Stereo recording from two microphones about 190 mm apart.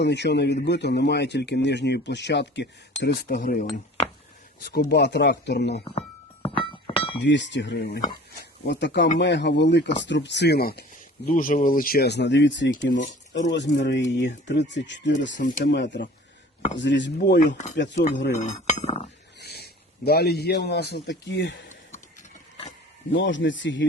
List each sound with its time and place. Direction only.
0.0 s speech: 65° left (ahead or behind); by 3.7 s 45° left (ahead or behind)
4.6 s speech: 55° left (ahead or behind)
5.8 s a sound: 30° left (ahead or behind)
7.2 s speech: 70° left (ahead or behind)
11.3 s speech: 45° left (ahead or behind); by 12.7 s 70° left (ahead or behind)
12.7 s speech: 45° left (ahead or behind)
13.5 s speech: 65° left (ahead or behind)
18.3 s speech: 40° left (ahead or behind)
19.4 s a man's voice: 60° left (ahead or behind)
23.1 s speech: 70° left (ahead or behind)